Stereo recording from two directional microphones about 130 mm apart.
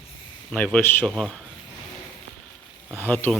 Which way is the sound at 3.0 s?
15° left (ahead or behind).